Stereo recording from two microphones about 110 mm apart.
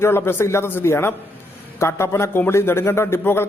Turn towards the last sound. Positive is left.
turn(degrees=20)  # may be behind; listen again after turning